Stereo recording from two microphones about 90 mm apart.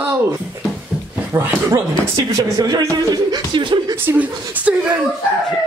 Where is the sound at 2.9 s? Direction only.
50° right (ahead or behind).